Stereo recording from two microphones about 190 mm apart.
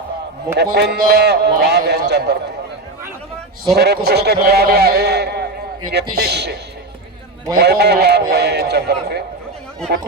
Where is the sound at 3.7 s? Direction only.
60° right (ahead or behind).